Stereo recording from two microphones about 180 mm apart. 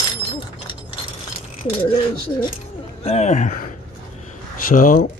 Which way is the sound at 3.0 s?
35° left (ahead or behind).